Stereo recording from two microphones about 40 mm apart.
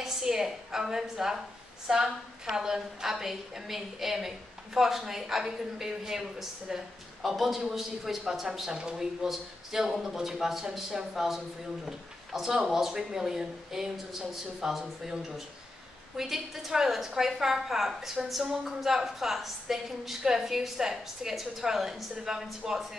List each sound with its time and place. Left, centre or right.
0.0 s a woman's voice: centre
8.5 s a woman's voice: centre